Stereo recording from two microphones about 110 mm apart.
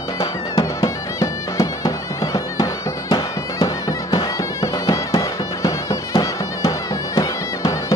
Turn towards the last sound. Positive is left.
turn(degrees=30)  # may be behind; listen again after turning